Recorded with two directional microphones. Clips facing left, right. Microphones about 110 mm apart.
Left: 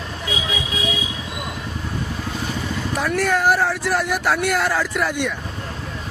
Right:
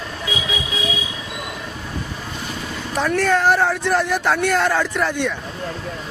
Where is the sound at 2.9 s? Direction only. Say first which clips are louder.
Right 3 dB; 5° left (ahead or behind).